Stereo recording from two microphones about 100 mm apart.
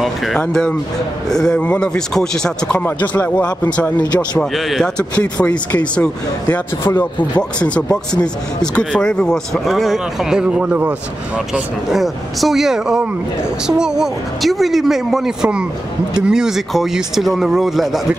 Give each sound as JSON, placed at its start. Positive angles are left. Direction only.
{"t": 0.0, "sound": "speech", "side_deg": 0}
{"t": 4.0, "sound": "speech", "side_deg": 45}
{"t": 4.4, "sound": "speech", "side_deg": 0}
{"t": 6.8, "sound": "speech", "side_deg": 25}
{"t": 7.6, "sound": "a man's voice", "side_deg": 10}